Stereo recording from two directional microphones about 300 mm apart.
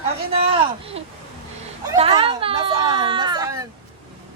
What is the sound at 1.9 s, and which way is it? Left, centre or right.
Speech, centre.